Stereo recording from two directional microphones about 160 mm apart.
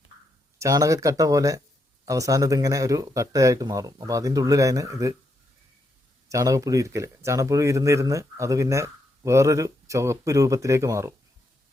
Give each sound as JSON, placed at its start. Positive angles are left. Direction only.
{"t": 0.6, "sound": "a man's voice", "side_deg": -20}
{"t": 6.2, "sound": "a man's voice", "side_deg": -20}